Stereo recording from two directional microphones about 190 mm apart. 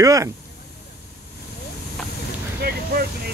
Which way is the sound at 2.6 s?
55° right (ahead or behind).